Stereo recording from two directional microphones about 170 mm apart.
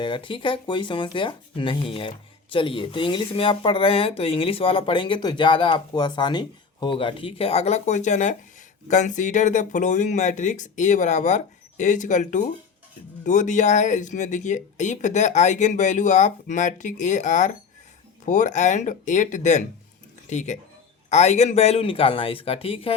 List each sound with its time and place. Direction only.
0.0 s speech: 30° left (ahead or behind)